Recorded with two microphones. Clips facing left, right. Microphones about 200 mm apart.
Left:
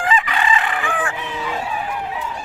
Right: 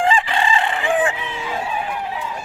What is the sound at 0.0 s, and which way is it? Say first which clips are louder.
Chicken: right 2 dB; 30° right (ahead or behind).